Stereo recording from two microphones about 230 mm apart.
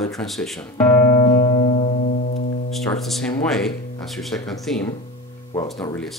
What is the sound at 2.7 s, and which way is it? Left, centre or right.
Speech, centre.